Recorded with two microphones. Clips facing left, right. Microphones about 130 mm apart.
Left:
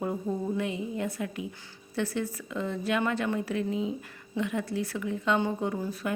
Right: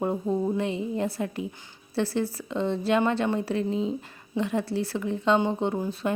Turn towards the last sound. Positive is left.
turn(degrees=-25)  # may be behind; listen again after turning